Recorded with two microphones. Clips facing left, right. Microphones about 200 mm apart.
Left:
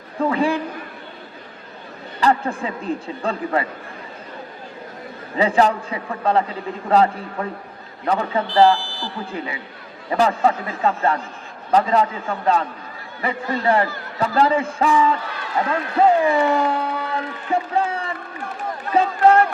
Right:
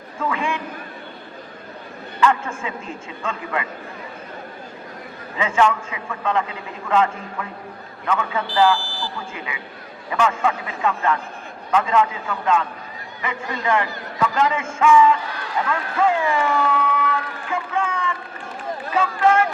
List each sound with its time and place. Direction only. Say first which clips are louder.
0.2 s a man's voice: left 6 dB; 35° left (ahead or behind)
2.2 s a man's voice: left 1 dB; 35° left (ahead or behind)
5.4 s a man's voice: left 2 dB; 35° left (ahead or behind)
16.6 s a sound: even; 35° left (ahead or behind)
18.9 s speech: left 3 dB; 35° left (ahead or behind)